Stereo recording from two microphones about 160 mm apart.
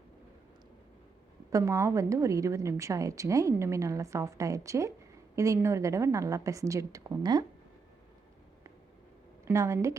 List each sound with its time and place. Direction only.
1.5 s a woman's voice: 20° right (ahead or behind)
9.5 s a woman's voice: 15° right (ahead or behind)